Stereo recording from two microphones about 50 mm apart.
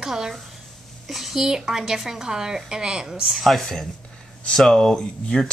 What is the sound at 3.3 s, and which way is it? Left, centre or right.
Speech, centre.